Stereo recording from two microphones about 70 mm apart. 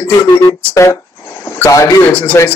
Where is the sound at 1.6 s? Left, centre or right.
Left.